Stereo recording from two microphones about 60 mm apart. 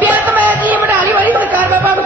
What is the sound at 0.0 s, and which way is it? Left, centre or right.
Music, right.